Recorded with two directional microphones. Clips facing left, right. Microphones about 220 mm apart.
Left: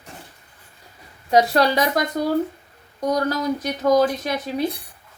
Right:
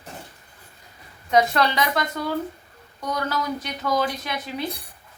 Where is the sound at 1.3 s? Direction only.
35° left (ahead or behind).